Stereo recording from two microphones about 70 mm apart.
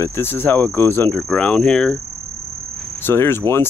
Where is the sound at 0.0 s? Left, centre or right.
Left.